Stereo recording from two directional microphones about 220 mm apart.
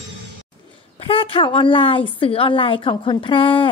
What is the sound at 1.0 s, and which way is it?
A woman's voice, 25° left (ahead or behind).